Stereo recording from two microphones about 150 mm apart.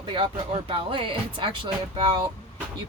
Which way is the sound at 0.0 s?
35° right (ahead or behind).